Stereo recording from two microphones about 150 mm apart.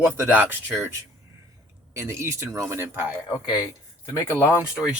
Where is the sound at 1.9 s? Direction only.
20° right (ahead or behind).